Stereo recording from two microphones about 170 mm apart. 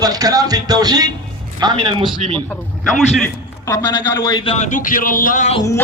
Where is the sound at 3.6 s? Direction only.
20° left (ahead or behind).